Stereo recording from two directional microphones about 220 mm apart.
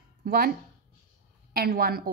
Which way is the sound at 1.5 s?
45° right (ahead or behind).